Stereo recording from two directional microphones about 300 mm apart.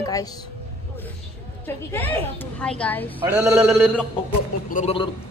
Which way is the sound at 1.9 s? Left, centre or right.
Centre.